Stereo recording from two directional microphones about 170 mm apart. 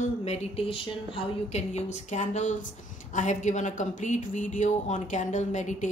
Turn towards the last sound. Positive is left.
turn(degrees=45)  # may be behind; listen again after turning